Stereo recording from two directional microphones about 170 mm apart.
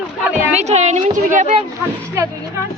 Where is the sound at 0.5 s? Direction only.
40° right (ahead or behind).